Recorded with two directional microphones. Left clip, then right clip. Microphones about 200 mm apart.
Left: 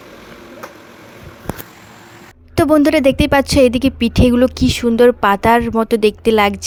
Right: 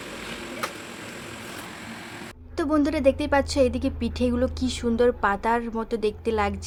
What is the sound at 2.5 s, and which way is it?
A woman's voice, 40° left (ahead or behind).